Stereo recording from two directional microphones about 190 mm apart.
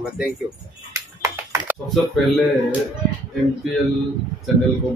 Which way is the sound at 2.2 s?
Centre (ahead or behind).